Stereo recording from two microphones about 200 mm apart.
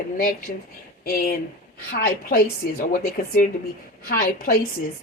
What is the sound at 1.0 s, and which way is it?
A woman's voice, 45° left (ahead or behind).